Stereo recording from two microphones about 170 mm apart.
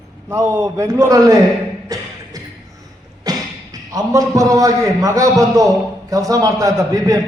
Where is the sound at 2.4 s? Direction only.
20° right (ahead or behind).